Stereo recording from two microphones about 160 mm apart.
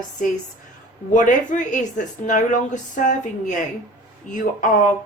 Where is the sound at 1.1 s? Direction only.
55° left (ahead or behind).